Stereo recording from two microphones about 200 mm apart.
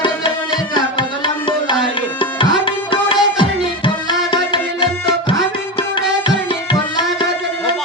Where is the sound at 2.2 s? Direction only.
25° left (ahead or behind).